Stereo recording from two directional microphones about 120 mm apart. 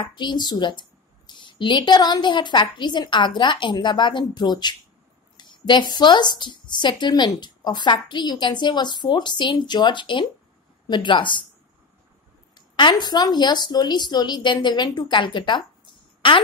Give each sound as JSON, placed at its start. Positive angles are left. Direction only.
{"t": 0.1, "sound": "a woman's voice", "side_deg": 40}
{"t": 12.5, "sound": "speech", "side_deg": 40}